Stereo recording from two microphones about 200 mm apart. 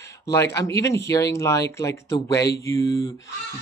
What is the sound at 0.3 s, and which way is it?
Speech, 15° left (ahead or behind).